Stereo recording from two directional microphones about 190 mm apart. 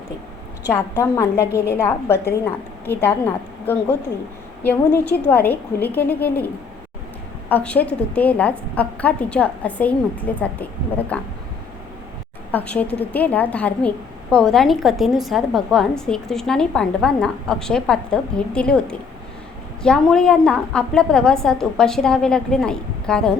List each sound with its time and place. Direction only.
0.7 s a woman's voice: 15° left (ahead or behind)
6.1 s a woman's voice: 55° left (ahead or behind)
7.5 s a woman's voice: 10° left (ahead or behind)
12.5 s a woman's voice: 10° left (ahead or behind)